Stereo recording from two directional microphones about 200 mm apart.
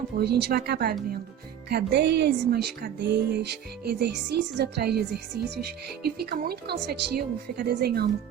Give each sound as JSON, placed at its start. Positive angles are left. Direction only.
{"t": 0.2, "sound": "a woman's voice", "side_deg": -55}